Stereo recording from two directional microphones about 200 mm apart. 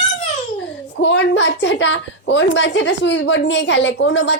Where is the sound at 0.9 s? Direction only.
60° left (ahead or behind).